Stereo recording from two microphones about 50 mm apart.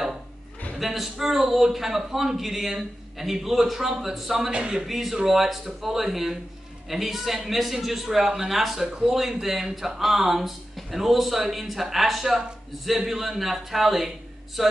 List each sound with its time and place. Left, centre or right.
0.7 s a man's voice: centre
4.5 s speech: centre
4.8 s a man's voice: centre